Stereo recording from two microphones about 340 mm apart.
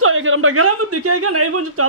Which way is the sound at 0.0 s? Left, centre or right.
Right.